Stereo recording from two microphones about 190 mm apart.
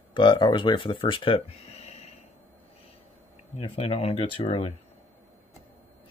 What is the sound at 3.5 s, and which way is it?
Speech, 30° left (ahead or behind).